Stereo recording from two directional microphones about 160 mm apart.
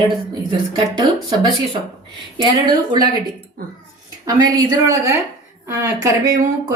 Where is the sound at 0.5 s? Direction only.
30° right (ahead or behind).